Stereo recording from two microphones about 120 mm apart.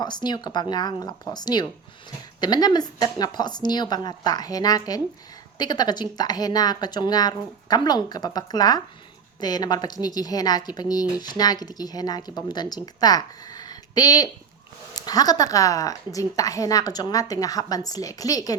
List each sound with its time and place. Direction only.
0.0 s a woman's voice: 35° left (ahead or behind)